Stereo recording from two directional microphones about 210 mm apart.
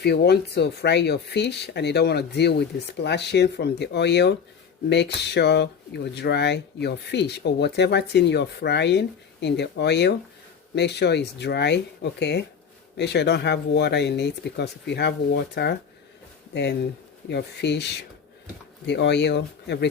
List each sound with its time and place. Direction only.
0.0 s speech: 50° left (ahead or behind)
17.2 s speech: 55° left (ahead or behind)